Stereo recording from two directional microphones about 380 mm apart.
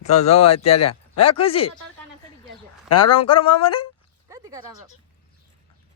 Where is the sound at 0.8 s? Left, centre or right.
Left.